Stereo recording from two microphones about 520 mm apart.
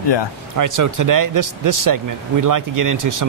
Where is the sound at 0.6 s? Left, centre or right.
Right.